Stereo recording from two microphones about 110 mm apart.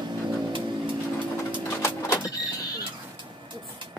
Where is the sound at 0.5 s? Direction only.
50° right (ahead or behind).